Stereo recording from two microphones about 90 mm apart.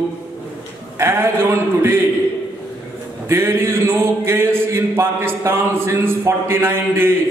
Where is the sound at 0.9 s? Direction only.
25° right (ahead or behind).